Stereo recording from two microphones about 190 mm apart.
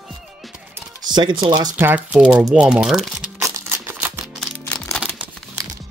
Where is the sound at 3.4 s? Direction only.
15° right (ahead or behind).